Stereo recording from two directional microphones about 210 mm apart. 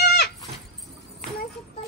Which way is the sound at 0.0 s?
50° left (ahead or behind).